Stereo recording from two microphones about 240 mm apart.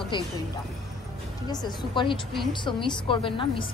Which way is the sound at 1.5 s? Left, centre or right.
Centre.